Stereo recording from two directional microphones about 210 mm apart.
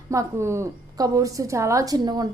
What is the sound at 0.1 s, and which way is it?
A woman's voice, 15° right (ahead or behind).